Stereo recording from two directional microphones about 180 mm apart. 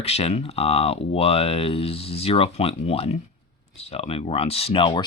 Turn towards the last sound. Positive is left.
turn(degrees=30)  # may be behind; listen again after turning